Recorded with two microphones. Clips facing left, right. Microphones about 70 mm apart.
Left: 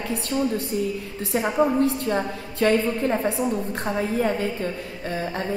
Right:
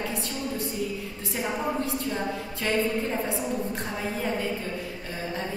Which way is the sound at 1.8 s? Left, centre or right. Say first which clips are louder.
Left 6 dB; left.